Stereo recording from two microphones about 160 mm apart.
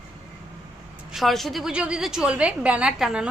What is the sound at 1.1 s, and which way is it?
A woman's voice, centre (ahead or behind).